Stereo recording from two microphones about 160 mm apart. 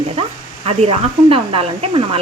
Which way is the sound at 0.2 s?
40° right (ahead or behind).